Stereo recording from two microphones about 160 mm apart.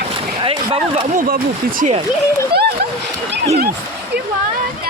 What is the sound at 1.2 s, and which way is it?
Speech, 65° right (ahead or behind).